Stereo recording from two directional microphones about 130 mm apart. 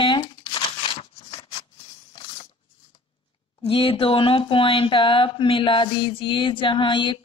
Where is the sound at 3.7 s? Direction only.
50° left (ahead or behind).